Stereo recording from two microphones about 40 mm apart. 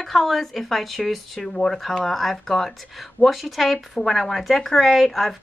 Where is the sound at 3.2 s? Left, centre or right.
Left.